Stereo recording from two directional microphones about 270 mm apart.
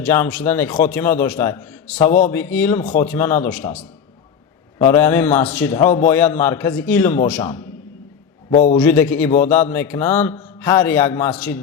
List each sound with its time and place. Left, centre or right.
0.0 s speech: centre
4.8 s speech: centre
8.4 s a man's voice: left
8.8 s speech: centre